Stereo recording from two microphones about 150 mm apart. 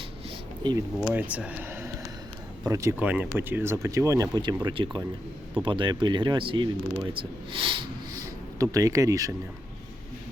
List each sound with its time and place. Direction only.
0.6 s speech: 30° right (ahead or behind)
1.1 s speech: 10° right (ahead or behind)
3.0 s speech: 10° right (ahead or behind)
4.6 s speech: 30° right (ahead or behind)
7.5 s a sound: 35° right (ahead or behind)
8.5 s speech: 20° right (ahead or behind)